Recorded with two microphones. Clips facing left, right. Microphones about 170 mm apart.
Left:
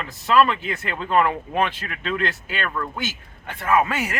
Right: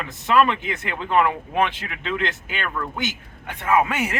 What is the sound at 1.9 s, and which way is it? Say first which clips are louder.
A man's voice: left 1 dB; 20° right (ahead or behind).